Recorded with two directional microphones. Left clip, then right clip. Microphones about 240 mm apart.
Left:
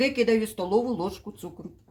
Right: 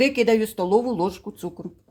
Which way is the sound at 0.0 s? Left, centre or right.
Right.